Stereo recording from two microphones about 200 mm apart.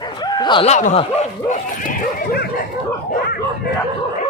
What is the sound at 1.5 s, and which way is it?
Dog, 40° left (ahead or behind).